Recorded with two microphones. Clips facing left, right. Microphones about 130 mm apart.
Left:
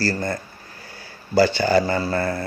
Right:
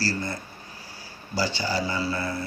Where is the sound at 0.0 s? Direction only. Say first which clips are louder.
Left 5 dB; 50° left (ahead or behind).